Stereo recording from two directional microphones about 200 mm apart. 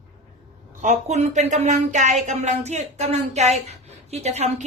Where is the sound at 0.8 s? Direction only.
35° right (ahead or behind).